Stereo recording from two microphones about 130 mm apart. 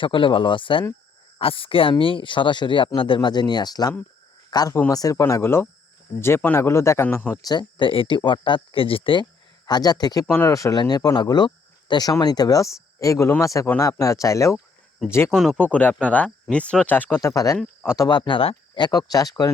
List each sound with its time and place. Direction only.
0.0 s speech: 40° left (ahead or behind); by 7.3 s 15° left (ahead or behind)
7.4 s speech: 30° left (ahead or behind)
9.6 s speech: 30° left (ahead or behind)
15.3 s speech: 5° left (ahead or behind)
17.2 s speech: 25° left (ahead or behind)
18.2 s speech: 40° left (ahead or behind)